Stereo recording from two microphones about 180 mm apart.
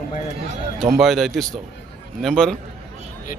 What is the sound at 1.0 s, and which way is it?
Speech, centre (ahead or behind).